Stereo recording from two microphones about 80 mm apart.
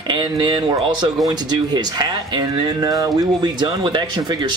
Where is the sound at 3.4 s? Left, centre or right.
Right.